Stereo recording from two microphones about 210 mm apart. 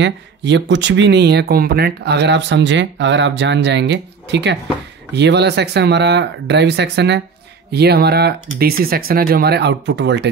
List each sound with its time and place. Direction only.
0.0 s speech: 55° right (ahead or behind)